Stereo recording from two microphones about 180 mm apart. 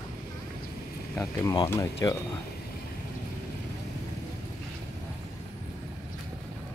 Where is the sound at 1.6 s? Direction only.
15° left (ahead or behind).